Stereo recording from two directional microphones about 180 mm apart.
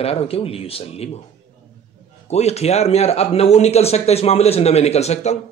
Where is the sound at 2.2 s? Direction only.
35° left (ahead or behind).